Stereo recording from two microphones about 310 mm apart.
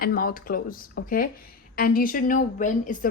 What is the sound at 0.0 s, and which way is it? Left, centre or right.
A woman's voice, left.